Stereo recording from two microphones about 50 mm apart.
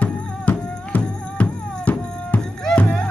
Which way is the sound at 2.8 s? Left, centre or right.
Centre.